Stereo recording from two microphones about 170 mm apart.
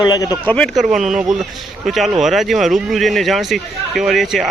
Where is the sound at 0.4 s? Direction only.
5° left (ahead or behind).